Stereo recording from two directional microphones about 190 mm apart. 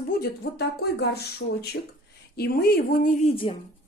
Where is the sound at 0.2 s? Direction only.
60° left (ahead or behind).